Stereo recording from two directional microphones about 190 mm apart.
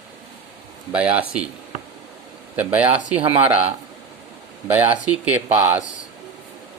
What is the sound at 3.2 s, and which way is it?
Speech, 30° right (ahead or behind).